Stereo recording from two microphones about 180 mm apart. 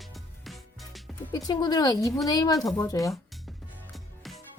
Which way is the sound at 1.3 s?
20° left (ahead or behind).